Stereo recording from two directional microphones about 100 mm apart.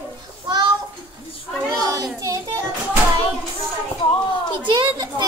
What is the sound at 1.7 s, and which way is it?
Speech, 35° right (ahead or behind).